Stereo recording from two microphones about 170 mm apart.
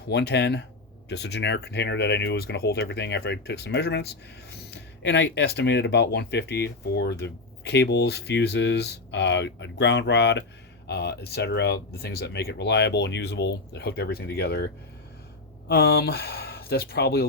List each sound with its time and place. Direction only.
0.1 s speech: 80° left
4.7 s speech: 90° left
10.8 s speech: 80° left